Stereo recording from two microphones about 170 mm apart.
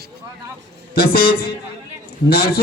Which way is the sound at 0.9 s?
60° left (ahead or behind).